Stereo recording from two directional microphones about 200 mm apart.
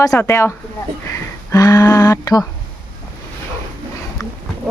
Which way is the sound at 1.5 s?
20° left (ahead or behind).